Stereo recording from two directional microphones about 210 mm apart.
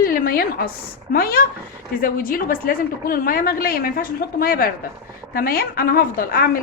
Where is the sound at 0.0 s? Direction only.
45° left (ahead or behind).